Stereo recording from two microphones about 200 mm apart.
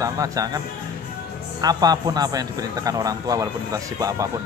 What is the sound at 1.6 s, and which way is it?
A man's voice, 20° right (ahead or behind).